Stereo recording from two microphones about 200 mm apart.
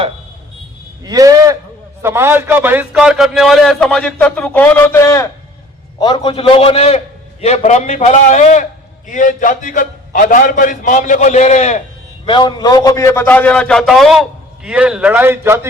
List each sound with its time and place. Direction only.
1.0 s a sound: 15° right (ahead or behind)
2.0 s a man's voice: 10° right (ahead or behind); by 5.3 s 15° left (ahead or behind)
6.0 s a man's voice: 25° left (ahead or behind)
12.2 s a man's voice: 25° left (ahead or behind); by 15.6 s 10° right (ahead or behind)